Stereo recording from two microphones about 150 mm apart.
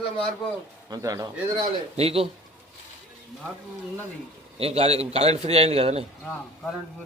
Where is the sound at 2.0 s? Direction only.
40° right (ahead or behind).